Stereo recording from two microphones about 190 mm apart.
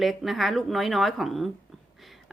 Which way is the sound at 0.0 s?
Centre (ahead or behind).